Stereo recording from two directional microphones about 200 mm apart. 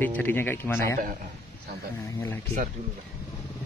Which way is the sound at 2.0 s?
15° left (ahead or behind).